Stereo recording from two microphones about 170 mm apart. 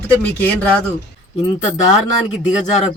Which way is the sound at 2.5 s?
45° left (ahead or behind).